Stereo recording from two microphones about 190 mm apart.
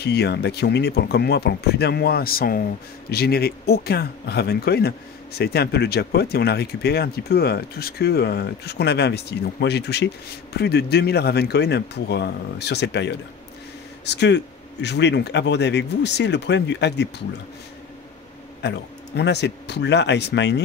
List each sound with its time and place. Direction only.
0.0 s speech: 60° left (ahead or behind)
18.6 s speech: 65° left (ahead or behind)